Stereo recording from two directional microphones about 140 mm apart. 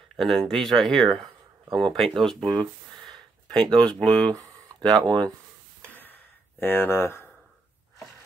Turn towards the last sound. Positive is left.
turn(degrees=15)  # may be behind; listen again after turning